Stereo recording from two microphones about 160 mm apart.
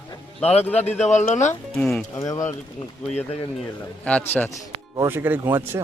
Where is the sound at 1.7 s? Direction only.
5° left (ahead or behind).